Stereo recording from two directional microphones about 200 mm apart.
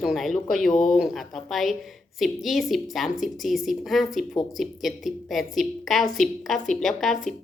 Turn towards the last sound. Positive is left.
turn(degrees=0)  # may be behind; listen again after turning